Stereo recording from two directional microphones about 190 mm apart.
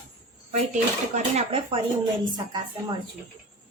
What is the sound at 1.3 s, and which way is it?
Speech, 30° right (ahead or behind).